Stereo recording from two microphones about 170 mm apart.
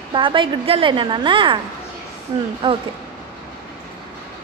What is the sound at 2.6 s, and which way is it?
Speech, 30° right (ahead or behind).